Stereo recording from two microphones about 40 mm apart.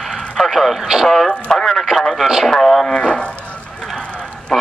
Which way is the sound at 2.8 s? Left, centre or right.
Centre.